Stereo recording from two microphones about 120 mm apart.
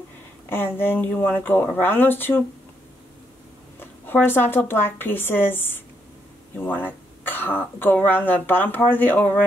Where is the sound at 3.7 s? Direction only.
15° left (ahead or behind).